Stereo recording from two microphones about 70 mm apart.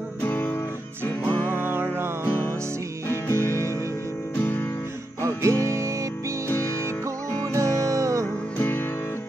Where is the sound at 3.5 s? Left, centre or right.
Right.